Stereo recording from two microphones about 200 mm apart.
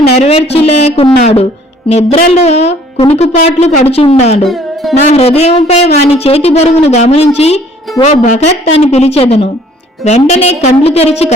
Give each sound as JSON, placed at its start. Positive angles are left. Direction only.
{"t": 0.1, "sound": "speech", "side_deg": 30}
{"t": 4.4, "sound": "music", "side_deg": 0}
{"t": 5.0, "sound": "speech", "side_deg": 30}